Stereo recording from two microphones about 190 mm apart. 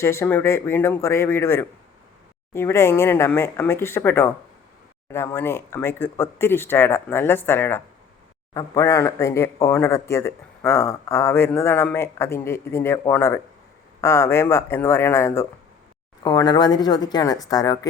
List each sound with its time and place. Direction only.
0.0 s a woman's voice: 15° left (ahead or behind)